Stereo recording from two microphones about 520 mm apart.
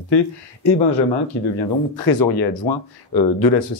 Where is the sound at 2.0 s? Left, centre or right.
Left.